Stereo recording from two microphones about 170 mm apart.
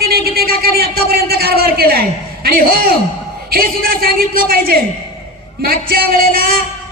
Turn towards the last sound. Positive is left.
turn(degrees=-60)  # may be behind; listen again after turning